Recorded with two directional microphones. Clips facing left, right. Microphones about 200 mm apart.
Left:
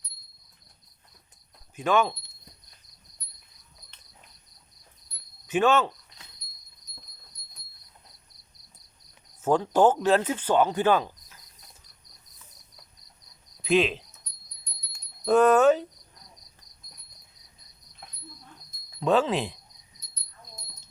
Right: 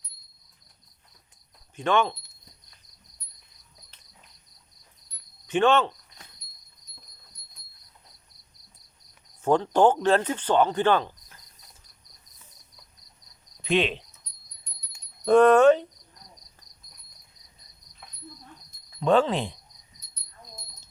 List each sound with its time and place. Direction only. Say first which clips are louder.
1.7 s speech: even; 5° left (ahead or behind)
5.5 s speech: right 1 dB; 5° left (ahead or behind)
9.4 s speech: right 1 dB; 5° left (ahead or behind)
13.6 s speech: left 2 dB; centre (ahead or behind)
15.2 s speech: right 3 dB; 5° left (ahead or behind)
19.0 s speech: right 2 dB; 5° left (ahead or behind)